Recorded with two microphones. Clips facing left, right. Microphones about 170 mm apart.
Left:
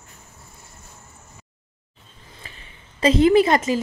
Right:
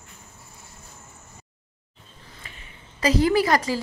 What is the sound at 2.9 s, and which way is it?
Speech, 25° left (ahead or behind).